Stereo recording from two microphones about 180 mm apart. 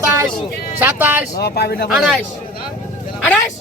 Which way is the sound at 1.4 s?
60° left (ahead or behind).